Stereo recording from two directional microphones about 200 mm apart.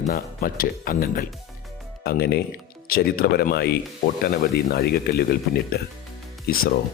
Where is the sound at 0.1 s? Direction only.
45° left (ahead or behind).